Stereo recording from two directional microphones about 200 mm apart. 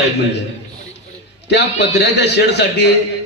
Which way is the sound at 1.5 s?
60° left (ahead or behind).